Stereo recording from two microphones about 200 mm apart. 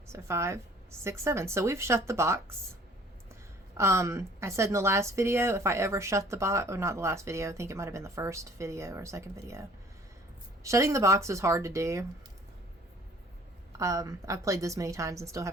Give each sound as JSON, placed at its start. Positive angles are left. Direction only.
{"t": 0.1, "sound": "speech", "side_deg": -15}
{"t": 3.8, "sound": "speech", "side_deg": -15}
{"t": 13.7, "sound": "speech", "side_deg": -15}